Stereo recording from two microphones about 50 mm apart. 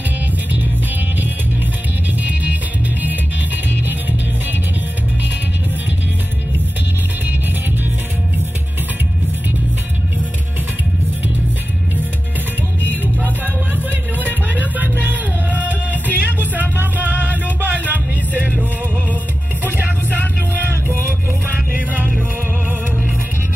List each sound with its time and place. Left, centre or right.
12.9 s music: right